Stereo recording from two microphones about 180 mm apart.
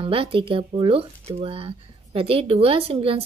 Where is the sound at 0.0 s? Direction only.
30° right (ahead or behind).